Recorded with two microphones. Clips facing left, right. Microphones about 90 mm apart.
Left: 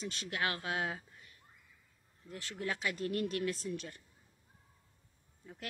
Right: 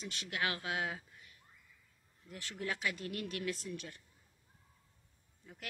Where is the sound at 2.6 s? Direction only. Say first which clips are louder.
Left 2 dB; 35° left (ahead or behind).